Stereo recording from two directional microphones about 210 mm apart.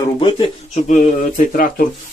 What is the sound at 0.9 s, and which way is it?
Speech, 40° left (ahead or behind).